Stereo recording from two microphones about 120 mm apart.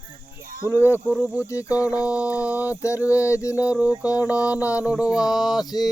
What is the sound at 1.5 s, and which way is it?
Speech, 25° left (ahead or behind).